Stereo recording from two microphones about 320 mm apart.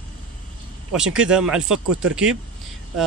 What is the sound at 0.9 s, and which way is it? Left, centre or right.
Speech, centre.